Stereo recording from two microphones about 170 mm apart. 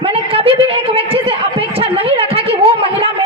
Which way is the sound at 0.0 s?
35° right (ahead or behind).